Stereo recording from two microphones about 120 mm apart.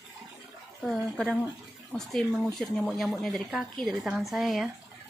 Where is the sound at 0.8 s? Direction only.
Centre (ahead or behind).